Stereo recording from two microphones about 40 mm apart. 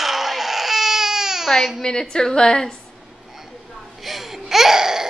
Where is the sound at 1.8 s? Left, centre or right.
Centre.